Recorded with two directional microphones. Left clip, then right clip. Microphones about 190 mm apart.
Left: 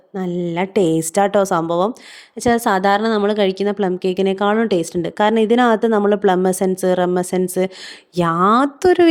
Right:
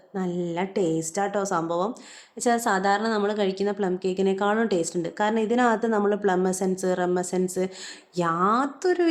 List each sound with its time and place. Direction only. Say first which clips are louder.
0.1 s a woman's voice: left 6 dB; 40° left (ahead or behind)